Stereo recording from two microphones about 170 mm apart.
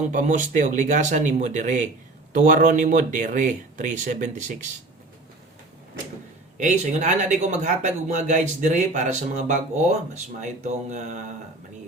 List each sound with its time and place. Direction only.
0.0 s speech: 50° right (ahead or behind)
6.6 s speech: 45° right (ahead or behind)